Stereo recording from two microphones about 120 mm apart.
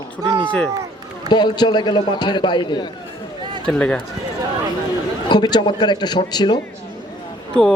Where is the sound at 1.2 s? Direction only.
40° left (ahead or behind).